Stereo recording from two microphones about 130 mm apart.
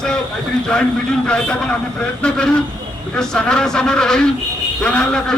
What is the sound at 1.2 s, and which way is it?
A man's voice, 10° left (ahead or behind).